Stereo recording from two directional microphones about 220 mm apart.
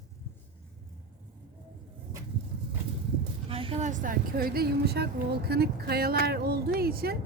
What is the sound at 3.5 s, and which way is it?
A woman's voice, 25° right (ahead or behind).